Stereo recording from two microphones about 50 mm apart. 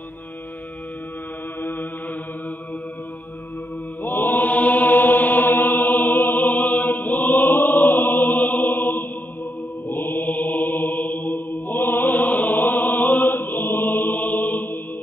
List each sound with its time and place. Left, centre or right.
1.6 s chant: left
4.0 s mantra: left